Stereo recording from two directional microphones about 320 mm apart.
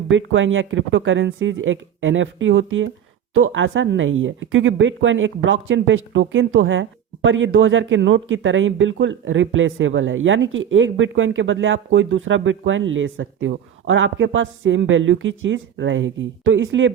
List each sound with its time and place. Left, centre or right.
0.1 s speech: right